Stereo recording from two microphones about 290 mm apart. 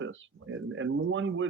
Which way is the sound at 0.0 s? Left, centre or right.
Right.